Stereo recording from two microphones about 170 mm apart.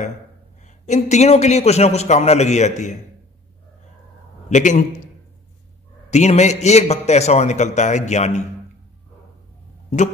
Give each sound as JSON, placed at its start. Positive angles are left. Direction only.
{"t": 0.7, "sound": "a man's voice", "side_deg": 45}
{"t": 4.5, "sound": "a man's voice", "side_deg": 45}